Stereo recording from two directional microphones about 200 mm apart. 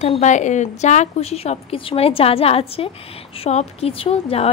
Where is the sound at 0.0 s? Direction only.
35° left (ahead or behind).